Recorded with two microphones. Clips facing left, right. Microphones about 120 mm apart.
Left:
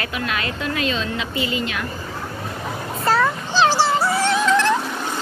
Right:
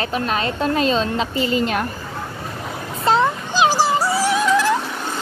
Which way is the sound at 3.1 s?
20° right (ahead or behind).